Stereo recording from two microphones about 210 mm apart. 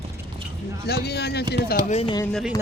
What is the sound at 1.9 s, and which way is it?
Speech, 30° left (ahead or behind).